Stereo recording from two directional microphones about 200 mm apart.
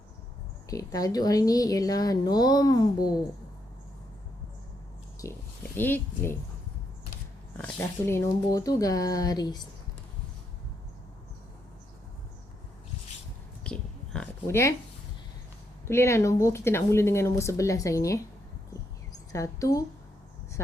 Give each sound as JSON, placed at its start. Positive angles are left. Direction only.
{"t": 0.7, "sound": "speech", "side_deg": 15}
{"t": 5.2, "sound": "speech", "side_deg": 15}
{"t": 7.5, "sound": "speech", "side_deg": 10}
{"t": 13.7, "sound": "a sound", "side_deg": 5}
{"t": 15.9, "sound": "speech", "side_deg": 15}
{"t": 19.3, "sound": "speech", "side_deg": 15}